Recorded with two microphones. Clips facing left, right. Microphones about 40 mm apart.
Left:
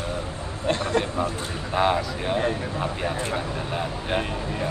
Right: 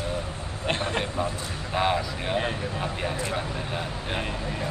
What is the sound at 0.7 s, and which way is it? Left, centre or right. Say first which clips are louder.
Speech: left 4 dB; right.